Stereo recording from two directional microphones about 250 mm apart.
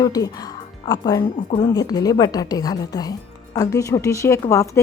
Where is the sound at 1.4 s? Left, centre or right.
Left.